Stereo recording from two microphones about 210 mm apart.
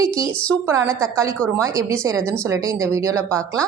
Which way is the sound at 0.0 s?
15° right (ahead or behind).